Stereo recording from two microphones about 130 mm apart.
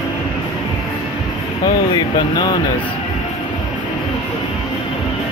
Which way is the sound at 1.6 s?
30° left (ahead or behind).